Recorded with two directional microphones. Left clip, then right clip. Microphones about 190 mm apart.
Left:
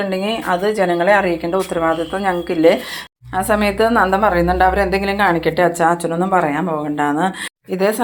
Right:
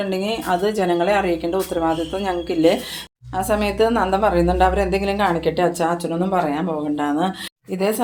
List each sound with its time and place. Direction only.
0.1 s a woman's voice: 15° left (ahead or behind)